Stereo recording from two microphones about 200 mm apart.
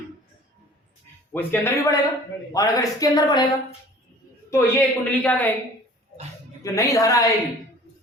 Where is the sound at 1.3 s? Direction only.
10° left (ahead or behind).